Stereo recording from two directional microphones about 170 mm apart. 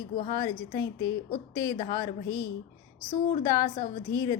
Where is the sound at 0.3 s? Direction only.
25° left (ahead or behind).